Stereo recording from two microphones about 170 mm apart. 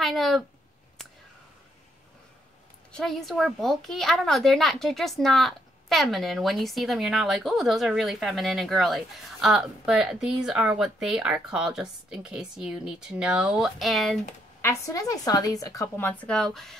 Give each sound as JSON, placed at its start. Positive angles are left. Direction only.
{"t": 0.0, "sound": "a sound", "side_deg": 0}
{"t": 2.9, "sound": "a child's voice", "side_deg": 0}
{"t": 14.6, "sound": "speech", "side_deg": 15}